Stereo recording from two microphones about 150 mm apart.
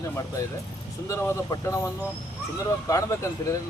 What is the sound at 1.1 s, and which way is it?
Speech, 20° left (ahead or behind).